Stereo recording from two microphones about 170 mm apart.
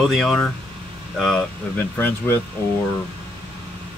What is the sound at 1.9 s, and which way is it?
Speech, 10° left (ahead or behind).